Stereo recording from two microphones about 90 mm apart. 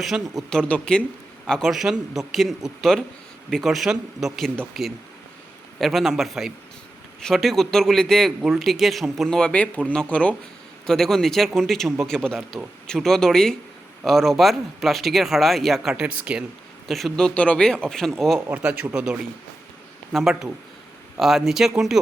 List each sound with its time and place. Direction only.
0.0 s speech: centre (ahead or behind)
0.6 s speech: 10° left (ahead or behind)
1.7 s speech: 5° right (ahead or behind); by 10.3 s 15° left (ahead or behind)
10.8 s speech: 5° left (ahead or behind)
16.9 s speech: 5° left (ahead or behind)
18.5 s speech: 15° right (ahead or behind)